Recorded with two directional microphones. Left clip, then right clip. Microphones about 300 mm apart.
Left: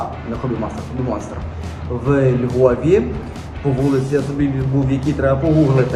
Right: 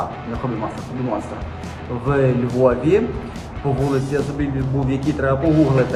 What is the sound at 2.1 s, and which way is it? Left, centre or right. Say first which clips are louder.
Speech: left 2 dB; centre.